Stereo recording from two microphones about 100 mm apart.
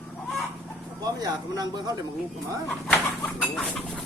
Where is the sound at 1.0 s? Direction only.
40° right (ahead or behind).